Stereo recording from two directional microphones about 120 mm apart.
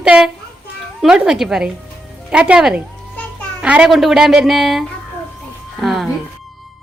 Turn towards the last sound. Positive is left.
turn(degrees=0)  # may be behind; listen again after turning